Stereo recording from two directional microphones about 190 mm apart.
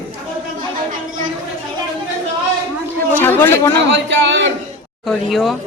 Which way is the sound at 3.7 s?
70° right (ahead or behind).